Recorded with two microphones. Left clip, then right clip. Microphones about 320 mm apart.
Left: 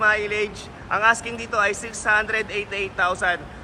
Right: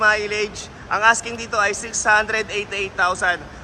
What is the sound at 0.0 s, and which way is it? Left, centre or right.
A man's voice, centre.